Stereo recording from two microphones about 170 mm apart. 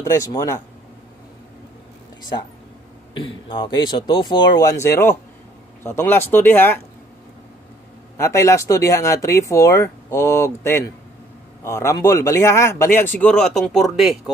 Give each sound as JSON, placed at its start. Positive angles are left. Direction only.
{"t": 0.0, "sound": "a man's voice", "side_deg": 20}
{"t": 3.2, "sound": "a man's voice", "side_deg": 30}
{"t": 8.2, "sound": "speech", "side_deg": 15}